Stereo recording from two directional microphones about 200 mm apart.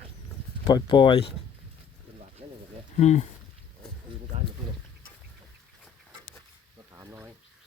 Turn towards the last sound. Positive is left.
turn(degrees=-10)  # may be behind; listen again after turning